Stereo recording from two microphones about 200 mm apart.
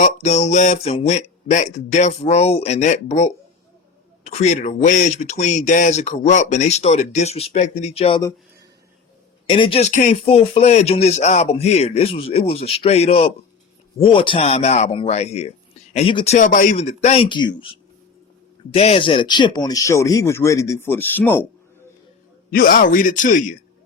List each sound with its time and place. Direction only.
0.0 s speech: 35° left (ahead or behind)
9.5 s speech: 25° left (ahead or behind); by 21.4 s 10° left (ahead or behind)
22.4 s speech: 45° left (ahead or behind)